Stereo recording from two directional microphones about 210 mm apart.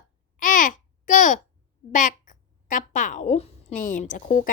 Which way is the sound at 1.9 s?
35° left (ahead or behind).